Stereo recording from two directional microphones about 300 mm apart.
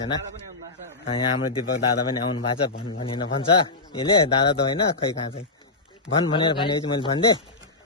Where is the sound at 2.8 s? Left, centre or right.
Centre.